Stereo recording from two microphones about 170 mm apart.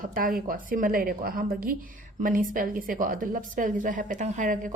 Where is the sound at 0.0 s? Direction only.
55° right (ahead or behind).